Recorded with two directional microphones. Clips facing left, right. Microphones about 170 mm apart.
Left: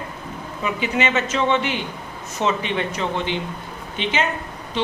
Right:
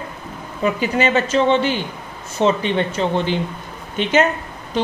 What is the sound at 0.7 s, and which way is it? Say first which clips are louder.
A woman's voice: right 4 dB; 40° right (ahead or behind).